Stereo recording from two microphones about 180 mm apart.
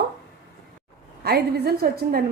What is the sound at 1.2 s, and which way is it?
A woman's voice, 60° right (ahead or behind).